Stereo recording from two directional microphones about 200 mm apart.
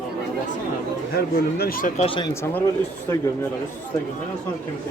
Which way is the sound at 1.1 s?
50° left (ahead or behind).